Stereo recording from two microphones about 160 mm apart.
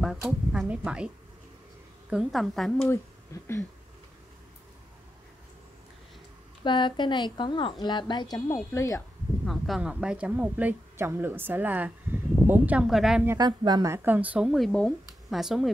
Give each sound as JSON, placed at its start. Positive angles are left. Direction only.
{"t": 0.0, "sound": "speech", "side_deg": 0}
{"t": 3.3, "sound": "a sound", "side_deg": 20}
{"t": 6.6, "sound": "speech", "side_deg": 30}
{"t": 9.5, "sound": "a woman's voice", "side_deg": -5}
{"t": 13.4, "sound": "speech", "side_deg": -25}